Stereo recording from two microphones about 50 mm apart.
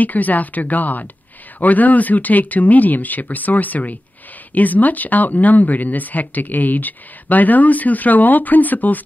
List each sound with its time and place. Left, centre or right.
0.0 s speech: left